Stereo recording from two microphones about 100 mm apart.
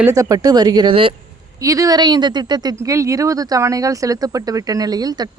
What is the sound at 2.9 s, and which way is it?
Speech, 30° right (ahead or behind).